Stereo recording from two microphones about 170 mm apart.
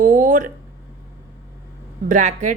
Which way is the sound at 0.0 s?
50° right (ahead or behind).